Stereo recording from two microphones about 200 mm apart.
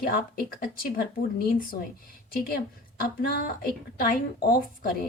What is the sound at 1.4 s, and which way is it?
Speech, 45° left (ahead or behind).